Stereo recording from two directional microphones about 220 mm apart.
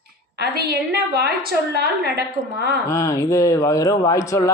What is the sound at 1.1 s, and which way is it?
A woman's voice, 45° right (ahead or behind).